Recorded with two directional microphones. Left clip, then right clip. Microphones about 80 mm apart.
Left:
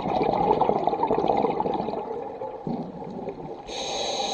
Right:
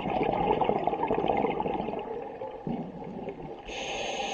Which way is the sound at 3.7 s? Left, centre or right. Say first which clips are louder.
Left 5 dB; left.